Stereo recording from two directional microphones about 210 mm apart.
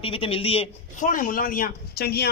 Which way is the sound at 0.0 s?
25° left (ahead or behind).